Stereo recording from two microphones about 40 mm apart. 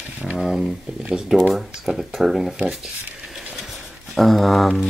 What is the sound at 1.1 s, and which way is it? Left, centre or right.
Speech, centre.